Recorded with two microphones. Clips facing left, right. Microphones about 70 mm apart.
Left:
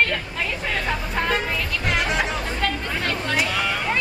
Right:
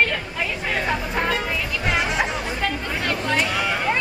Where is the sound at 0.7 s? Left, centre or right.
Centre.